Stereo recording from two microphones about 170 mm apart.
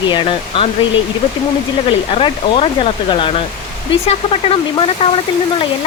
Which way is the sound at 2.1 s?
35° left (ahead or behind).